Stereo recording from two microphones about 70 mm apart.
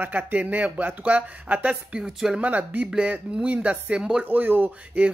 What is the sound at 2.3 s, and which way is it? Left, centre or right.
Speech, right.